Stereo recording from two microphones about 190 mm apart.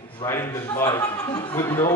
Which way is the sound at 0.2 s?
15° left (ahead or behind).